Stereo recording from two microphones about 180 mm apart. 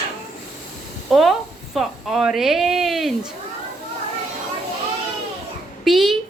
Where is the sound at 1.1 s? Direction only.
Centre (ahead or behind).